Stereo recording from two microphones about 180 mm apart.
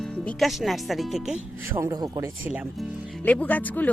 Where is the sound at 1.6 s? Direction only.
15° right (ahead or behind).